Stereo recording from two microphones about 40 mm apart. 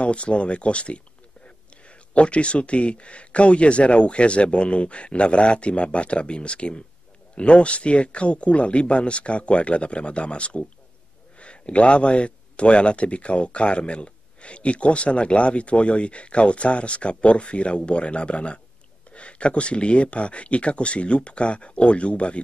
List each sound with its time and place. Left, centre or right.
0.0 s a man's voice: left